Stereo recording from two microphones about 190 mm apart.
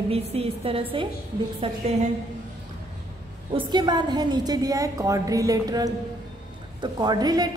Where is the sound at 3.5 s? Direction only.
25° right (ahead or behind).